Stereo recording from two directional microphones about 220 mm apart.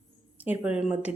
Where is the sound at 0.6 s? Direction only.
5° right (ahead or behind).